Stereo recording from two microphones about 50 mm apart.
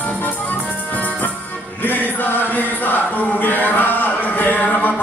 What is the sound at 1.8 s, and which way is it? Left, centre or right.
Chant, left.